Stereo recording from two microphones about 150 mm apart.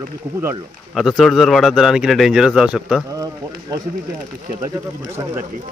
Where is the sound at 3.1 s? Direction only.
25° right (ahead or behind).